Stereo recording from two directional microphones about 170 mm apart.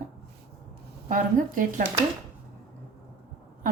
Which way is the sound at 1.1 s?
50° right (ahead or behind).